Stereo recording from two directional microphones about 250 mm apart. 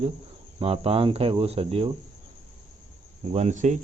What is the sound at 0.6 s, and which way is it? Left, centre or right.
Speech, right.